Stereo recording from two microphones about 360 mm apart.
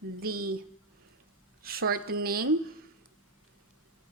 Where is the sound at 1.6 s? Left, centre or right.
Right.